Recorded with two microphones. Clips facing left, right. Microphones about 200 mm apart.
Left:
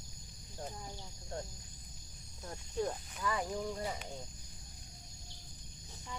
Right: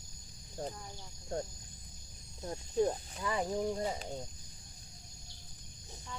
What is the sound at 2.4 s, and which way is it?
Speech, 25° right (ahead or behind).